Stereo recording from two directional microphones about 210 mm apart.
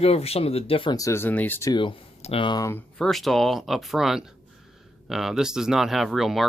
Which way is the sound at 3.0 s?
Centre (ahead or behind).